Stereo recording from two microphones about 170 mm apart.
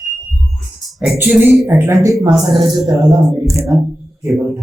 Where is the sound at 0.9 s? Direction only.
Centre (ahead or behind).